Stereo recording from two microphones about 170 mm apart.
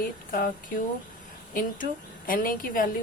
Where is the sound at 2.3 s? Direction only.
55° left (ahead or behind).